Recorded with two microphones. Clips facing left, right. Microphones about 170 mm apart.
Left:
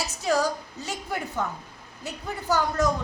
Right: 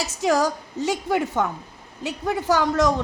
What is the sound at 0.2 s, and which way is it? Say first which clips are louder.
A woman's voice: right 4 dB; 90° right.